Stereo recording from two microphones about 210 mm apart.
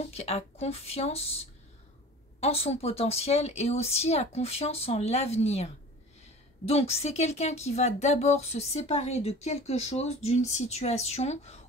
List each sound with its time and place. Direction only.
0.1 s a woman's voice: 30° left (ahead or behind)
6.7 s speech: 30° left (ahead or behind)